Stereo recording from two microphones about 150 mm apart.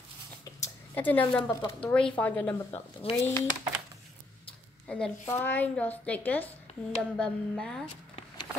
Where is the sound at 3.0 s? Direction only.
40° left (ahead or behind).